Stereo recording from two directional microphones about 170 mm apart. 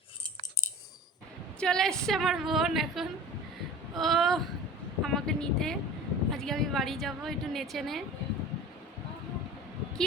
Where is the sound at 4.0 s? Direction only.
Centre (ahead or behind).